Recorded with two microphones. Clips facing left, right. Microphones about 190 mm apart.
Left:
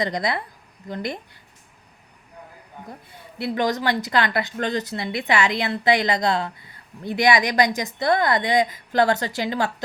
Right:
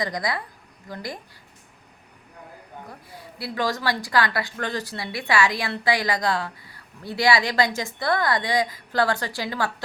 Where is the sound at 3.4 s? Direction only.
20° left (ahead or behind).